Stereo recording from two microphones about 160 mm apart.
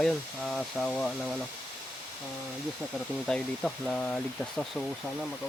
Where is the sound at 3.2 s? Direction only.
5° left (ahead or behind).